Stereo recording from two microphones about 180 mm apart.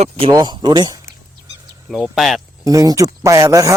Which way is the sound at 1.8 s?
Centre (ahead or behind).